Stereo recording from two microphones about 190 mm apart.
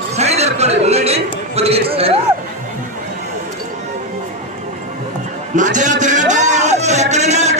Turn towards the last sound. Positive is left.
turn(degrees=-35)  # may be behind; listen again after turning